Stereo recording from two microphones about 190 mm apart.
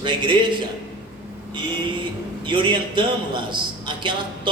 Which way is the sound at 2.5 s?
25° right (ahead or behind).